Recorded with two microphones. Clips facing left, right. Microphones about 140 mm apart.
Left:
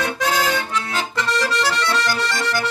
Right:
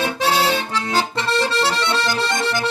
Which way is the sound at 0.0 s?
25° right (ahead or behind).